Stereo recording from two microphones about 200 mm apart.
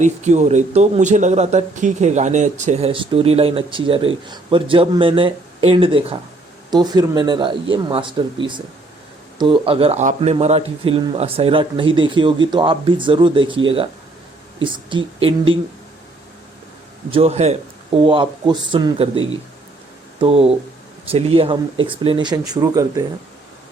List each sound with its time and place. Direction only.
0.0 s speech: 35° right (ahead or behind)
17.1 s speech: 30° right (ahead or behind)